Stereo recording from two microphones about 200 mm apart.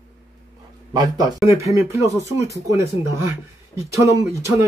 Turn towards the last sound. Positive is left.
turn(degrees=-15)  # may be behind; listen again after turning